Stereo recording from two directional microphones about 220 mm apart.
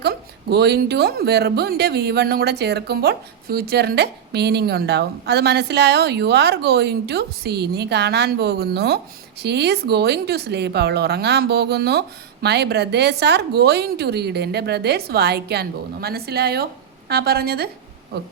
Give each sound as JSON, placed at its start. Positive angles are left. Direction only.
{"t": 0.0, "sound": "speech", "side_deg": -45}